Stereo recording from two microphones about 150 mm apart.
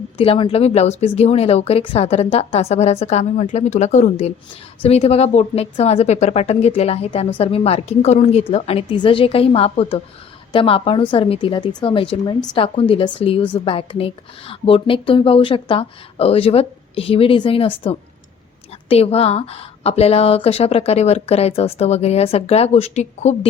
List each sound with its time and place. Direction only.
0.2 s speech: 35° left (ahead or behind)